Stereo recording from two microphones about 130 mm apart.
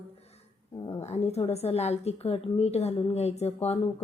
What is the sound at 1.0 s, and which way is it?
A woman's voice, 55° left (ahead or behind).